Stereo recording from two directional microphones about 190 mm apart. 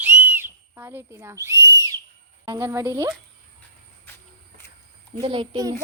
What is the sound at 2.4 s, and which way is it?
Speech, 15° right (ahead or behind).